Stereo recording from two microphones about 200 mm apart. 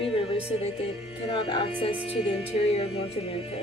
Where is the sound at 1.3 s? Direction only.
25° left (ahead or behind).